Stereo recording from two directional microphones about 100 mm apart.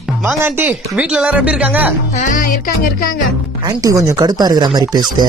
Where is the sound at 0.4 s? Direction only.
20° right (ahead or behind).